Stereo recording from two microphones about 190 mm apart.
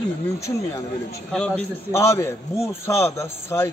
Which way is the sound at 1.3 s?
5° left (ahead or behind).